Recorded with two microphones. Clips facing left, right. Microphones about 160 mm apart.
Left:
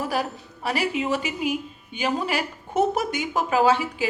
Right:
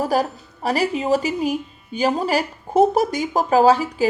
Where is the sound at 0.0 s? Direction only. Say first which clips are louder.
Right 6 dB; 40° right (ahead or behind).